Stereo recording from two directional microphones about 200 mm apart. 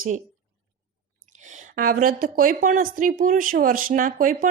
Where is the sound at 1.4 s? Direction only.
40° right (ahead or behind).